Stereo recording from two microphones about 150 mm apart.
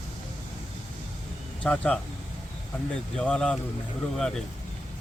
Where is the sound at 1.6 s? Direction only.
10° left (ahead or behind).